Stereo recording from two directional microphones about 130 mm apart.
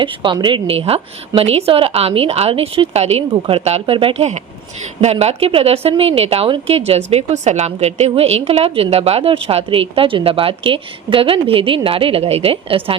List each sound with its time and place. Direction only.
0.0 s a woman's voice: 40° right (ahead or behind)
0.8 s a woman's voice: 50° right (ahead or behind)